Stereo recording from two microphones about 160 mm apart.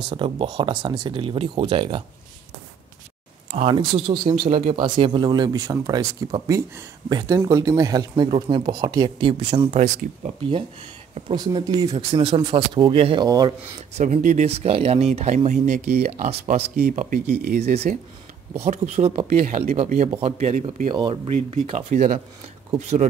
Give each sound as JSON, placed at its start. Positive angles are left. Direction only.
{"t": 0.1, "sound": "speech", "side_deg": -35}
{"t": 3.5, "sound": "speech", "side_deg": -35}
{"t": 4.5, "sound": "speech", "side_deg": -45}
{"t": 4.7, "sound": "speech", "side_deg": -35}
{"t": 11.3, "sound": "speech", "side_deg": -25}
{"t": 13.9, "sound": "speech", "side_deg": -50}
{"t": 16.0, "sound": "speech", "side_deg": -75}
{"t": 16.3, "sound": "speech", "side_deg": -40}
{"t": 16.6, "sound": "speech", "side_deg": -65}
{"t": 18.6, "sound": "speech", "side_deg": -45}
{"t": 19.2, "sound": "speech", "side_deg": -55}
{"t": 20.9, "sound": "speech", "side_deg": -30}